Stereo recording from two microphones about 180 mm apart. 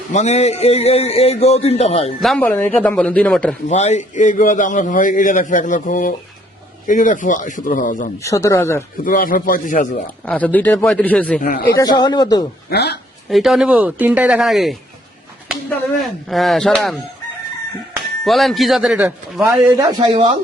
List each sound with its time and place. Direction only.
0.1 s a man's voice: 40° left (ahead or behind)
2.2 s speech: 5° left (ahead or behind)
3.7 s a man's voice: 40° left (ahead or behind)
8.2 s speech: 15° left (ahead or behind)
9.0 s a man's voice: 50° left (ahead or behind)
10.2 s speech: 10° left (ahead or behind)
11.3 s a man's voice: 55° left (ahead or behind)
11.8 s speech: 20° left (ahead or behind)
12.7 s speech: 65° left (ahead or behind)
13.3 s speech: centre (ahead or behind)
18.3 s a man's voice: centre (ahead or behind); by 20.3 s 25° right (ahead or behind)